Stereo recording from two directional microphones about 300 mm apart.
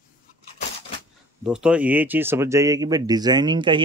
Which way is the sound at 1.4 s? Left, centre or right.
Centre.